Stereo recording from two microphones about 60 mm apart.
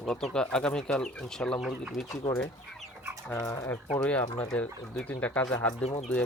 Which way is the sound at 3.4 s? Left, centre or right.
Left.